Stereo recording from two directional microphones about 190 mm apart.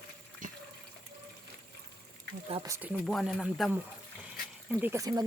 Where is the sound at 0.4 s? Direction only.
40° right (ahead or behind).